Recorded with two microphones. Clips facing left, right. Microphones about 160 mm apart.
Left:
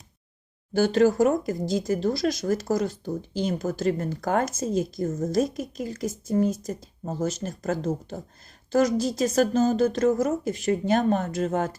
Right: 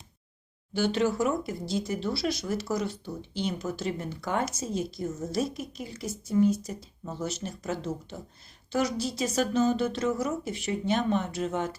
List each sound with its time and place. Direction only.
0.7 s speech: 45° left (ahead or behind)